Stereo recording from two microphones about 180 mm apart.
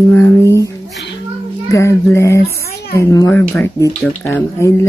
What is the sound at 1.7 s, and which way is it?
Speech, 15° left (ahead or behind).